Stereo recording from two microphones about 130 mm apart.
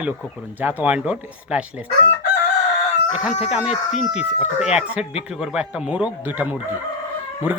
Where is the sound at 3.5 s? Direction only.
5° right (ahead or behind).